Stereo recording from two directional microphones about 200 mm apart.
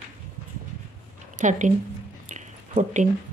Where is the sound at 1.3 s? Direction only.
40° right (ahead or behind).